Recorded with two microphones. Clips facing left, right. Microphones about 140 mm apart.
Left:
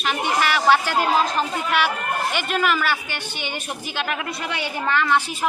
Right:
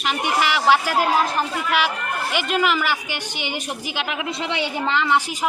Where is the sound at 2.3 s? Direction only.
15° right (ahead or behind).